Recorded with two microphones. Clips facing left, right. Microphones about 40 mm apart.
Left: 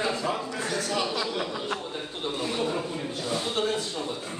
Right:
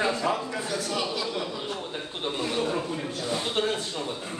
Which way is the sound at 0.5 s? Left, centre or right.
Left.